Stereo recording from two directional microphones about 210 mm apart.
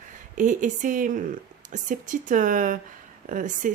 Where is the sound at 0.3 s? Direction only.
35° right (ahead or behind).